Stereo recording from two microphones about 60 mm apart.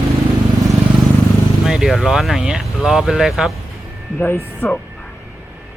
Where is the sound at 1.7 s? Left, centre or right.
Centre.